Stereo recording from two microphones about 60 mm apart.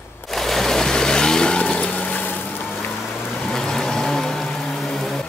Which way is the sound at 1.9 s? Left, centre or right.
Left.